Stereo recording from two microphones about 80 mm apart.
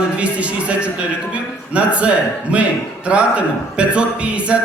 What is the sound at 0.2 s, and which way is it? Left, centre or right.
Speech, centre.